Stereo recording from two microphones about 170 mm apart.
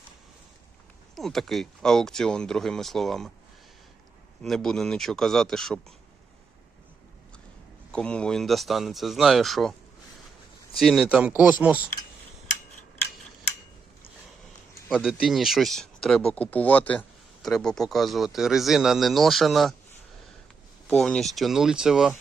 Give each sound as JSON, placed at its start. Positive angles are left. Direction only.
{"t": 1.1, "sound": "speech", "side_deg": 0}
{"t": 4.4, "sound": "speech", "side_deg": 5}
{"t": 7.9, "sound": "speech", "side_deg": 5}
{"t": 10.8, "sound": "speech", "side_deg": 0}
{"t": 14.8, "sound": "speech", "side_deg": -5}
{"t": 20.8, "sound": "speech", "side_deg": 5}